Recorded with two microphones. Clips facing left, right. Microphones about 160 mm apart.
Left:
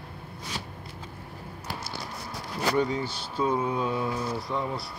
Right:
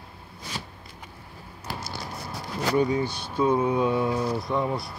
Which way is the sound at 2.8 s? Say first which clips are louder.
Right 6 dB; 15° right (ahead or behind).